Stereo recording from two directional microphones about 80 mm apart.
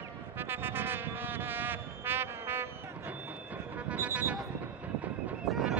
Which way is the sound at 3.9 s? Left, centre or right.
Right.